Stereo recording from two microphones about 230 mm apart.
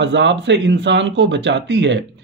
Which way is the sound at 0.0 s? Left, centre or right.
Right.